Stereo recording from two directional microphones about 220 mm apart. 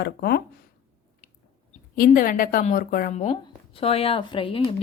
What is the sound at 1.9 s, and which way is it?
A woman's voice, 40° left (ahead or behind).